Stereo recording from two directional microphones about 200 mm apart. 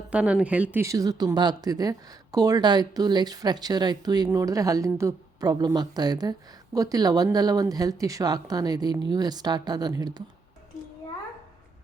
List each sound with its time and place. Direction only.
0.1 s speech: 5° right (ahead or behind)